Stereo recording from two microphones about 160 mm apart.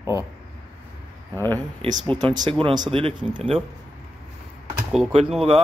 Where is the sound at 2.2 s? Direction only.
25° right (ahead or behind).